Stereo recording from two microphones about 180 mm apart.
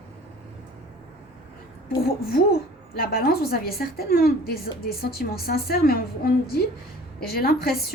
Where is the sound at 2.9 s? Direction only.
55° left (ahead or behind).